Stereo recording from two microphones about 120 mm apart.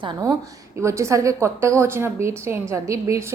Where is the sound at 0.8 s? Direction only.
25° right (ahead or behind).